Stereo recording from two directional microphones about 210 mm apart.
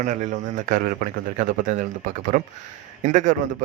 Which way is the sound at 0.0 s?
35° right (ahead or behind).